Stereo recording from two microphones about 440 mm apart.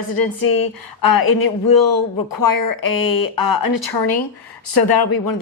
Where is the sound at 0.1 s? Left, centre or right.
Left.